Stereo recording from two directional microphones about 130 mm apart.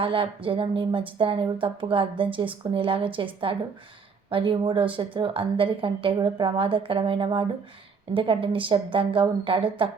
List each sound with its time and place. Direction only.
0.0 s a woman's voice: 45° right (ahead or behind)